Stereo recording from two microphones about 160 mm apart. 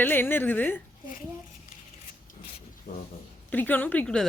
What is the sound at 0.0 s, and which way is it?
Speech, 15° left (ahead or behind).